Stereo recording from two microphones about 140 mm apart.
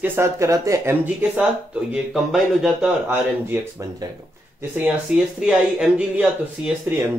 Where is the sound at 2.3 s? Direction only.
Centre (ahead or behind).